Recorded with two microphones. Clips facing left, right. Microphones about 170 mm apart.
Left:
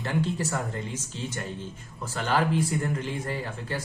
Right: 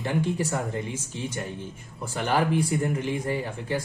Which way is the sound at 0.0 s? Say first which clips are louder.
Right 2 dB; 15° right (ahead or behind).